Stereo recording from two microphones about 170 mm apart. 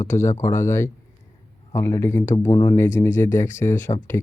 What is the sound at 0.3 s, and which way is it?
Speech, 15° left (ahead or behind).